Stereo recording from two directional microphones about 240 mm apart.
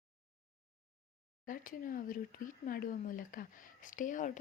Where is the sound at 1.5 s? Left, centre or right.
Left.